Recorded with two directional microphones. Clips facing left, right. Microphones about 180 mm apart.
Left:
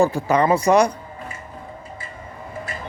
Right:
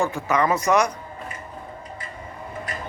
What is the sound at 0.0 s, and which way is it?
Speech, 30° left (ahead or behind).